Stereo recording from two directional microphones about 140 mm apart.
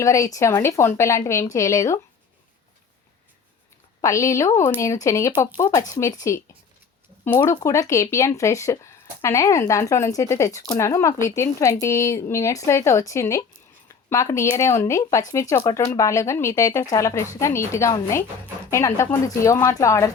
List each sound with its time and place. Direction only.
0.0 s a woman's voice: 20° left (ahead or behind)
4.0 s a woman's voice: 20° left (ahead or behind)
7.6 s a woman's voice: 20° left (ahead or behind)
13.8 s a sound: 20° left (ahead or behind)
14.5 s a woman's voice: 20° left (ahead or behind)